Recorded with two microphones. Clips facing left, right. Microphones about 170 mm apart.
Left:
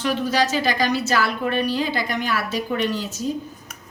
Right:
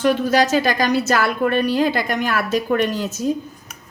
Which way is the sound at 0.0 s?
50° right (ahead or behind).